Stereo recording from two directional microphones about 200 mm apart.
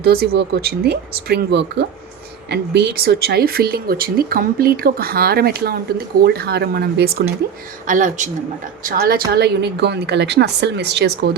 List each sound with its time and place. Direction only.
0.0 s a woman's voice: 50° right (ahead or behind)
7.9 s a woman's voice: 40° right (ahead or behind); by 11.3 s 55° right (ahead or behind)